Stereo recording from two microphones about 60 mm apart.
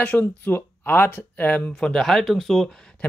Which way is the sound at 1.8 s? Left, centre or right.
Centre.